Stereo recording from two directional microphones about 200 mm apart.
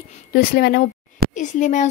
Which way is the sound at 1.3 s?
40° left (ahead or behind).